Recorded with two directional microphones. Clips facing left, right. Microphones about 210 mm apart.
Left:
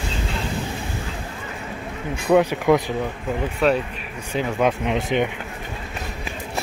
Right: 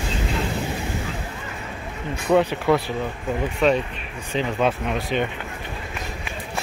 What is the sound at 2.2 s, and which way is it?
Speech, 10° left (ahead or behind).